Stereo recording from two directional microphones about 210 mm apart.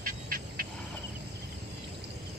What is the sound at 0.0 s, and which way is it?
Music, 45° right (ahead or behind).